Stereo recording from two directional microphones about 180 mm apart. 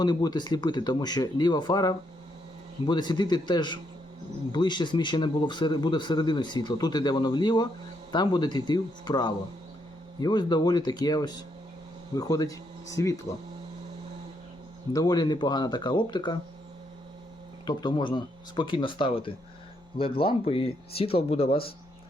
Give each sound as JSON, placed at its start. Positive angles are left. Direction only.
{"t": 0.0, "sound": "speech", "side_deg": 20}
{"t": 14.9, "sound": "speech", "side_deg": 20}
{"t": 17.7, "sound": "speech", "side_deg": 25}